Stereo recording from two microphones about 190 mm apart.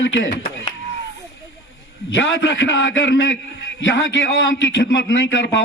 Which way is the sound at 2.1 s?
75° left (ahead or behind).